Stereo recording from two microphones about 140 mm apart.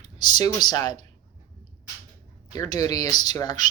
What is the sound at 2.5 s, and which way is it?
Speech, 25° left (ahead or behind).